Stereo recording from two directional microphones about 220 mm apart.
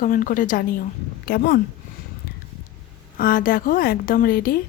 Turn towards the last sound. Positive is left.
turn(degrees=40)  # may be behind; listen again after turning